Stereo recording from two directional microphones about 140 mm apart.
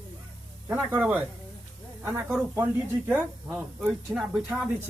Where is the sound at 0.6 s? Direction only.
10° right (ahead or behind).